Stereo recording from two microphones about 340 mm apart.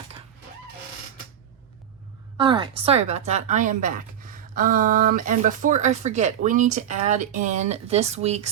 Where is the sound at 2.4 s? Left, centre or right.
Centre.